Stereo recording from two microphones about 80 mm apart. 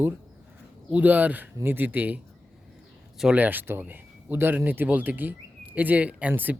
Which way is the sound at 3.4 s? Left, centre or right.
Right.